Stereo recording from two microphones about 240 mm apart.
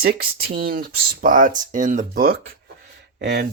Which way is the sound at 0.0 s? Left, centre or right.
Right.